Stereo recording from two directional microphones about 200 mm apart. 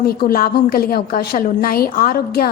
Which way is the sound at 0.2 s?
50° left (ahead or behind).